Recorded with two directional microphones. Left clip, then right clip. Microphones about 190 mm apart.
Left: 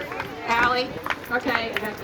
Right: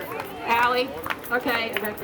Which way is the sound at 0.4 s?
45° right (ahead or behind).